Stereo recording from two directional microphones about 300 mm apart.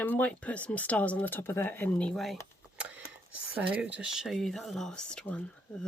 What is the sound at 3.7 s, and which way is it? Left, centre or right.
Speech, centre.